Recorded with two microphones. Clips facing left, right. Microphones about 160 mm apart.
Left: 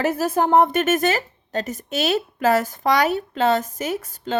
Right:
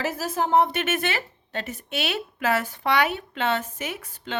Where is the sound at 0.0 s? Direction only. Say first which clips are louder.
Left 6 dB; 55° left (ahead or behind).